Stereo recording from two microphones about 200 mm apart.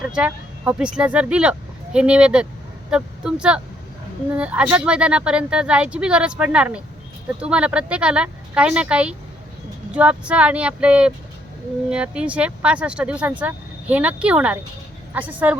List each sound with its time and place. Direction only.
0.0 s a woman's voice: 5° right (ahead or behind)